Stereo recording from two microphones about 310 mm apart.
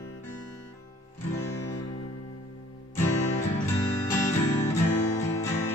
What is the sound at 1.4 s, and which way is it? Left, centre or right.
Music, centre.